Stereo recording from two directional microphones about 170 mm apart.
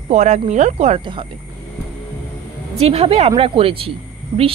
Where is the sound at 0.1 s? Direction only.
40° right (ahead or behind).